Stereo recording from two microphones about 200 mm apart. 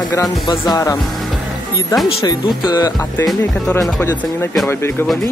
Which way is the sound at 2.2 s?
20° left (ahead or behind).